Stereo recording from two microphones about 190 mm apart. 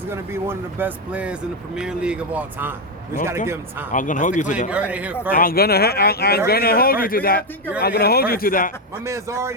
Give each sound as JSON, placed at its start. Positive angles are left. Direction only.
{"t": 0.1, "sound": "speech", "side_deg": -10}
{"t": 3.9, "sound": "speech", "side_deg": 40}
{"t": 4.7, "sound": "speech", "side_deg": -5}
{"t": 5.3, "sound": "a man's voice", "side_deg": 50}
{"t": 9.0, "sound": "speech", "side_deg": -15}